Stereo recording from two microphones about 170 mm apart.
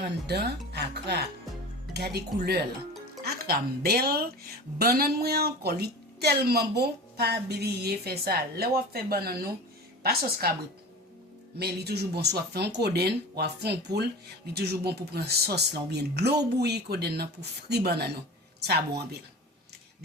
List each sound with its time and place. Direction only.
0.3 s a woman's voice: 75° right (ahead or behind)
11.6 s speech: 75° right (ahead or behind)